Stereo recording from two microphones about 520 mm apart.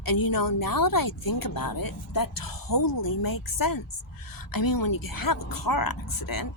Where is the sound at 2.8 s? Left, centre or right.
Left.